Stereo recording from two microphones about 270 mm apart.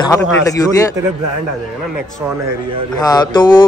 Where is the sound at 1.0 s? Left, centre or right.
Centre.